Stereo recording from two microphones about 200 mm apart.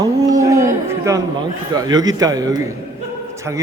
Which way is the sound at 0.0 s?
15° right (ahead or behind).